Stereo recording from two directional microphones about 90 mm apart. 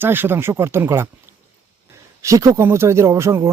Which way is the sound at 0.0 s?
25° right (ahead or behind).